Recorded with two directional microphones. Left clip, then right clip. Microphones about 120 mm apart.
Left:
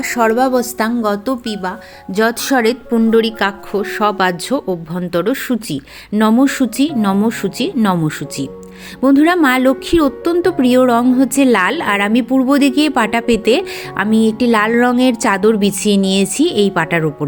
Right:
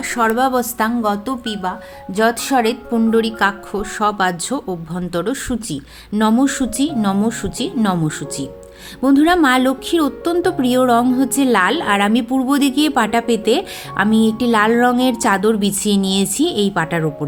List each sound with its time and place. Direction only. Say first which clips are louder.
0.0 s speech: left 3 dB; 30° left (ahead or behind)
2.9 s a woman's voice: left 4 dB; 20° left (ahead or behind)